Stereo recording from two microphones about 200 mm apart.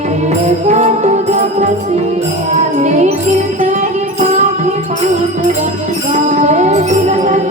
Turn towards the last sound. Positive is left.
turn(degrees=-35)  # may be behind; listen again after turning